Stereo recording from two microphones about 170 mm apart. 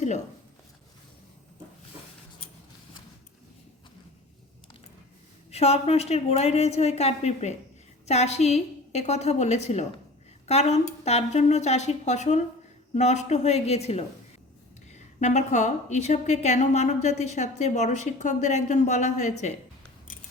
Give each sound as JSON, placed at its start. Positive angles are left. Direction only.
{"t": 5.5, "sound": "a woman's voice", "side_deg": 35}